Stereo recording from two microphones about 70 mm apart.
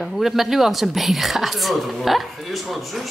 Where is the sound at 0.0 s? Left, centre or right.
Centre.